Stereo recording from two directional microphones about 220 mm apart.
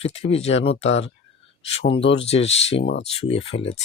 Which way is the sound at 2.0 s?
55° left (ahead or behind).